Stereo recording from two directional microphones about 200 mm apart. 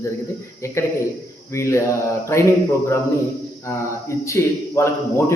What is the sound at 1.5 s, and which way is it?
Speech, 15° left (ahead or behind).